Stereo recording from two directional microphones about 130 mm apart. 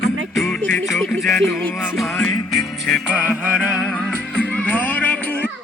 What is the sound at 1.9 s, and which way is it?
Music, centre (ahead or behind).